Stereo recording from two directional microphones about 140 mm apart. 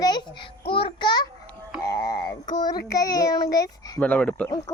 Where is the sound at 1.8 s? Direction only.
25° left (ahead or behind).